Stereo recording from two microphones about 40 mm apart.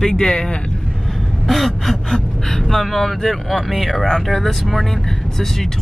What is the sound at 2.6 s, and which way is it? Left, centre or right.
Speech, centre.